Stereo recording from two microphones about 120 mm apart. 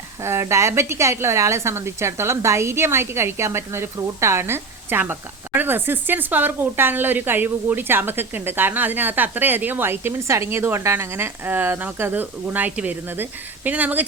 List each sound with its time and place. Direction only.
0.2 s a woman's voice: 20° right (ahead or behind)